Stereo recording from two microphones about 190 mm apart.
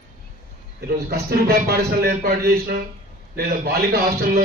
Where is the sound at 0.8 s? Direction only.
55° right (ahead or behind).